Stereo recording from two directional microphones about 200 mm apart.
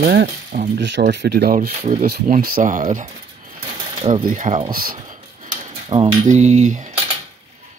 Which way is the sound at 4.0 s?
20° right (ahead or behind).